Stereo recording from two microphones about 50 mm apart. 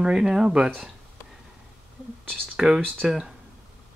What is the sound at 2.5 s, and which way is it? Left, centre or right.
Speech, centre.